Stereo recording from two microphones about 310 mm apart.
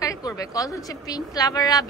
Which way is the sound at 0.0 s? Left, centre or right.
Centre.